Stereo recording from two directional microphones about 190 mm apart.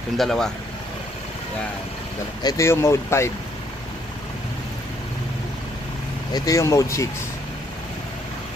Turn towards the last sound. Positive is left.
turn(degrees=15)  # may be behind; listen again after turning